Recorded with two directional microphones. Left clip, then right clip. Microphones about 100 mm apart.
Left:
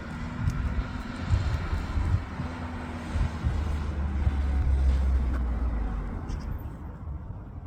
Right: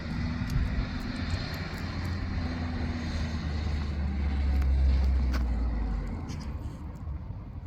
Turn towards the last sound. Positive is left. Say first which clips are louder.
# left 1 dB
turn(degrees=40)  # may be behind; listen again after turning